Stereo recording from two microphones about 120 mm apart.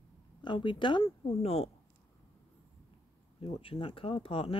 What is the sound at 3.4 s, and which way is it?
Speech, 50° left (ahead or behind).